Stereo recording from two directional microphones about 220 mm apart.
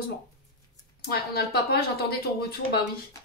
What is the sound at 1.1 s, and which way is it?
Speech, 45° left (ahead or behind).